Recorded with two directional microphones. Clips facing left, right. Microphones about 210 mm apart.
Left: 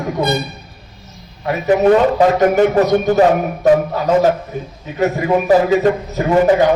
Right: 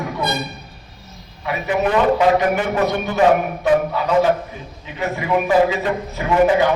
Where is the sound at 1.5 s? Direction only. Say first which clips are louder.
Left 8 dB; 40° left (ahead or behind).